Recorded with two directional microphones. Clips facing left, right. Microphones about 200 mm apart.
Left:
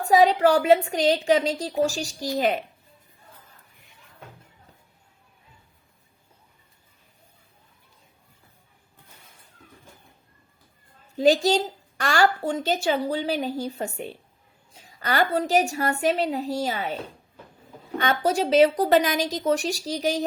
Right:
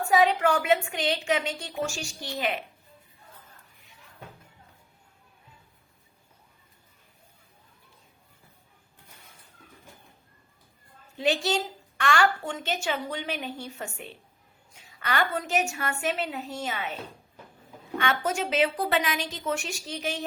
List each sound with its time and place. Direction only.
0.0 s a woman's voice: 35° left (ahead or behind)
11.2 s a woman's voice: 40° left (ahead or behind)